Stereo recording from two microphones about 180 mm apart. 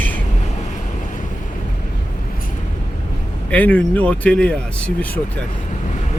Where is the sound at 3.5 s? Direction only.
10° left (ahead or behind).